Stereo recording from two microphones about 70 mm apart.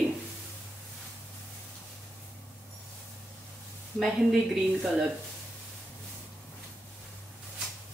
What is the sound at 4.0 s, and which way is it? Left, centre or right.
Speech, centre.